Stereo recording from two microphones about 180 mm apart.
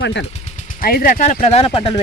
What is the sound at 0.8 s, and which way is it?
Speech, 55° left (ahead or behind).